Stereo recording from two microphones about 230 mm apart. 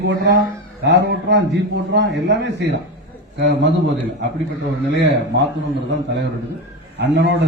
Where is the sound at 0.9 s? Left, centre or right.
Right.